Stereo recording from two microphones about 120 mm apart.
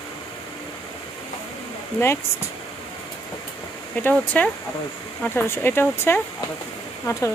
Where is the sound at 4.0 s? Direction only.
15° left (ahead or behind).